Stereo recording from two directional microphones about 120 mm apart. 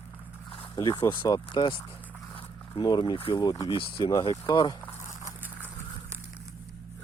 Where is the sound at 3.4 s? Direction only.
35° left (ahead or behind).